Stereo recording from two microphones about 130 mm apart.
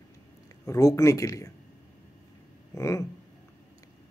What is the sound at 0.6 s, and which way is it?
Speech, 25° left (ahead or behind).